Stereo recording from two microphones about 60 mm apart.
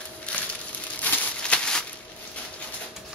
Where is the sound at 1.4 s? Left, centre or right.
Centre.